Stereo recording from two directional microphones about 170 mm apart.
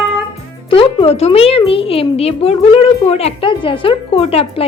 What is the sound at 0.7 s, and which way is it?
A child's voice, 30° left (ahead or behind).